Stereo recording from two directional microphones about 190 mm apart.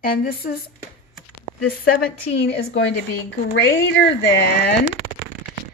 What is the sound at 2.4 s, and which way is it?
Speech, 60° left (ahead or behind).